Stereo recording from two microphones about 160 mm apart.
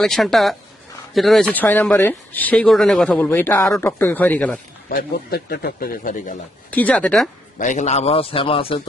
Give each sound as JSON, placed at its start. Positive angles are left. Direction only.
{"t": 0.0, "sound": "speech", "side_deg": 0}
{"t": 4.9, "sound": "speech", "side_deg": 75}
{"t": 6.7, "sound": "speech", "side_deg": 10}
{"t": 7.6, "sound": "a man's voice", "side_deg": 50}